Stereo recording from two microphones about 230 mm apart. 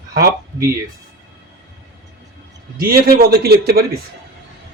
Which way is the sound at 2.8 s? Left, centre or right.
Right.